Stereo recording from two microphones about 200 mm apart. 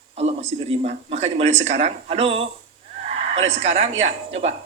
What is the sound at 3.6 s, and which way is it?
Speech, 30° right (ahead or behind).